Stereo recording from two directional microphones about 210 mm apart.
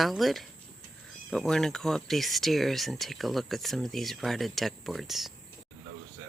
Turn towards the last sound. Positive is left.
turn(degrees=0)  # may be behind; listen again after turning